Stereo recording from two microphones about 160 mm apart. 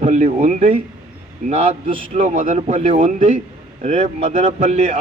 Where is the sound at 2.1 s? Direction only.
50° right (ahead or behind).